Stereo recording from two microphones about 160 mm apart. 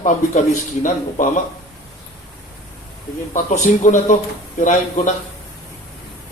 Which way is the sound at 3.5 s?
50° left (ahead or behind).